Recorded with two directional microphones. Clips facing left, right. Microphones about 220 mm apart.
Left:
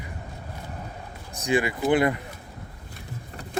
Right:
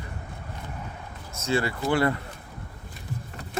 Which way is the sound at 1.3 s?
15° left (ahead or behind).